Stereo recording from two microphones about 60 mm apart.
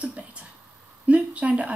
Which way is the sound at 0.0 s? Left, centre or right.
Right.